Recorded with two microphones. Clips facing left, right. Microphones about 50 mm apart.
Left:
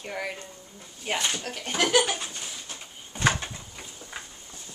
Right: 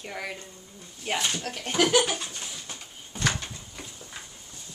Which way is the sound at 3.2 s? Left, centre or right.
Left.